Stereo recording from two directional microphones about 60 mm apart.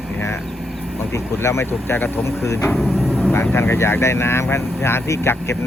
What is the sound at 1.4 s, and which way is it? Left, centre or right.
Speech, left.